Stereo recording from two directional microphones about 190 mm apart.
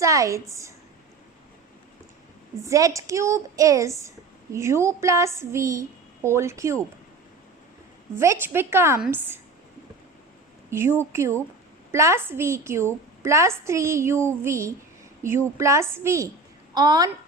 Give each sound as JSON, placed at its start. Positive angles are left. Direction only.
{"t": 0.0, "sound": "a woman's voice", "side_deg": -15}
{"t": 2.6, "sound": "a woman's voice", "side_deg": -15}
{"t": 8.1, "sound": "a woman's voice", "side_deg": -15}
{"t": 10.7, "sound": "a woman's voice", "side_deg": -15}